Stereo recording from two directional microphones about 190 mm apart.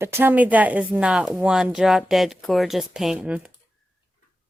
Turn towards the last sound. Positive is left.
turn(degrees=-5)  # may be behind; listen again after turning